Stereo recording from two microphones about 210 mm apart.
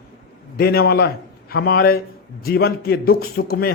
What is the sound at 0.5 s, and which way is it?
A man's voice, 50° left (ahead or behind).